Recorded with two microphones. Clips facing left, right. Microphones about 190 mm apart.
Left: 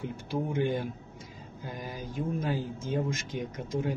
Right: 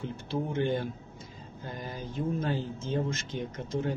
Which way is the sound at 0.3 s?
10° left (ahead or behind).